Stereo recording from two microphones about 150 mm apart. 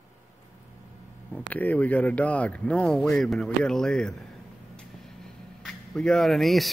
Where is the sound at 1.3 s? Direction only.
10° left (ahead or behind).